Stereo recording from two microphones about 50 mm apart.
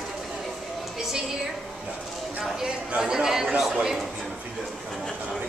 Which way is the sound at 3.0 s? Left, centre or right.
Centre.